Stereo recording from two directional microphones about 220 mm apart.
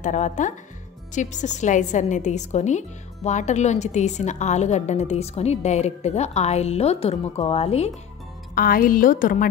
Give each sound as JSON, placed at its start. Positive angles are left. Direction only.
{"t": 0.0, "sound": "a woman's voice", "side_deg": 35}
{"t": 8.5, "sound": "a woman's voice", "side_deg": 40}